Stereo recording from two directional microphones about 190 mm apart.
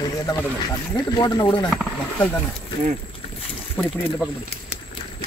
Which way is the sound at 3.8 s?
10° left (ahead or behind).